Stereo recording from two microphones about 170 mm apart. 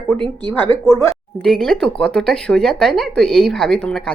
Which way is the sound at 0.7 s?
15° left (ahead or behind).